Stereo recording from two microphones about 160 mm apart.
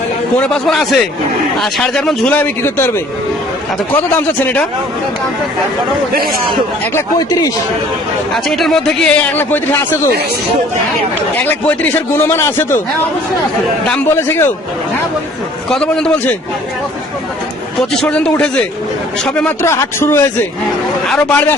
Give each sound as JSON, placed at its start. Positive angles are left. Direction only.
{"t": 0.3, "sound": "speech", "side_deg": 5}
{"t": 6.9, "sound": "speech", "side_deg": 20}
{"t": 8.3, "sound": "speech", "side_deg": 0}
{"t": 11.3, "sound": "speech", "side_deg": 10}
{"t": 13.8, "sound": "speech", "side_deg": 5}
{"t": 15.7, "sound": "speech", "side_deg": 5}
{"t": 17.9, "sound": "speech", "side_deg": 5}